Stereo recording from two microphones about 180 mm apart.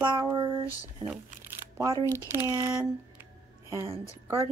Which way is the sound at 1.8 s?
20° right (ahead or behind).